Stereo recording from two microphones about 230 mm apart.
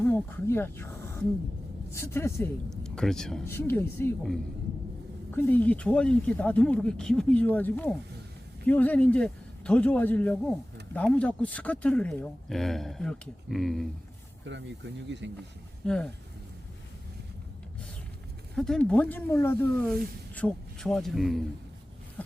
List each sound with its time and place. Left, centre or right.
0.0 s speech: centre
14.4 s speech: right
15.9 s speech: centre
18.5 s a man's voice: centre